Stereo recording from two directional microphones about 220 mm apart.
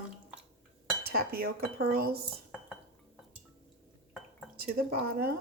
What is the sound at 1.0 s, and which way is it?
Speech, 45° right (ahead or behind).